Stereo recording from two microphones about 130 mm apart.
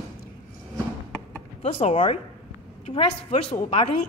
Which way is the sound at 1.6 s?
45° left (ahead or behind).